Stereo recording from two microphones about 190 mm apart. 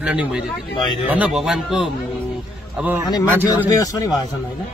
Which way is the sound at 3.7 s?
20° left (ahead or behind).